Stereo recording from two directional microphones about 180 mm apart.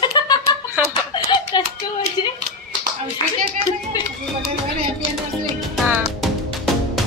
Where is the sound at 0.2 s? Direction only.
25° left (ahead or behind).